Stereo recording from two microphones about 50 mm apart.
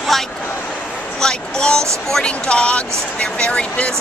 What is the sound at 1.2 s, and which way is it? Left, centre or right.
Speech, centre.